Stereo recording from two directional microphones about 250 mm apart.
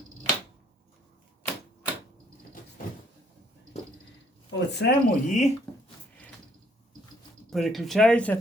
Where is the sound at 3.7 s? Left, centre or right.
Left.